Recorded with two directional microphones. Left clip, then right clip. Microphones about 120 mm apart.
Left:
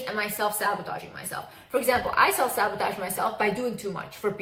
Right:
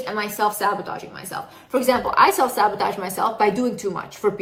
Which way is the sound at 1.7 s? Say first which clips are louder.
Right 5 dB; 25° right (ahead or behind).